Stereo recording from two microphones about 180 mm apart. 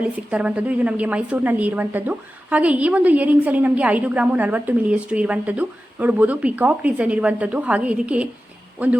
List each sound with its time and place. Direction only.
0.0 s a woman's voice: 5° right (ahead or behind)